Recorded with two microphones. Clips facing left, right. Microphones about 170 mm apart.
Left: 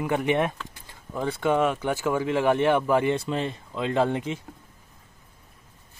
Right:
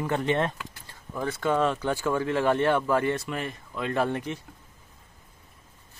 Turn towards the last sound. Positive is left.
turn(degrees=20)  # may be behind; listen again after turning